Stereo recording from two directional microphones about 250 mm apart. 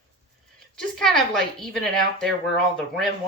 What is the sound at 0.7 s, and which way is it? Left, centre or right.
Speech, centre.